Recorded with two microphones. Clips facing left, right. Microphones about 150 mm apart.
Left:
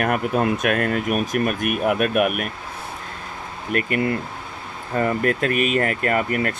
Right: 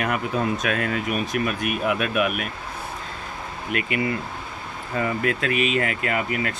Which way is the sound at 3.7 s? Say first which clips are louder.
Left 3 dB; 45° left (ahead or behind).